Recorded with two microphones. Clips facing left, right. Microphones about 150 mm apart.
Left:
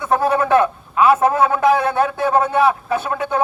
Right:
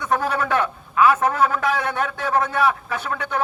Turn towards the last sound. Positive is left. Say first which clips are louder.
# left 6 dB
turn(degrees=25)  # may be behind; listen again after turning